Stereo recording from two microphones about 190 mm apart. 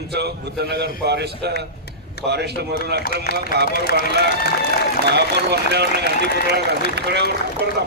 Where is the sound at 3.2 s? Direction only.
55° left (ahead or behind).